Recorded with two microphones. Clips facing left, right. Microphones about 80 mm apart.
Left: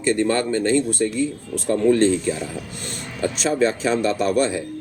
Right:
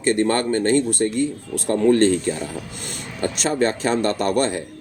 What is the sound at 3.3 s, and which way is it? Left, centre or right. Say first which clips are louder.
A man's voice: left 1 dB; right.